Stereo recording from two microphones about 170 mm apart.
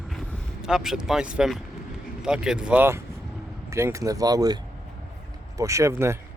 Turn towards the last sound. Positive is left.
turn(degrees=-15)  # may be behind; listen again after turning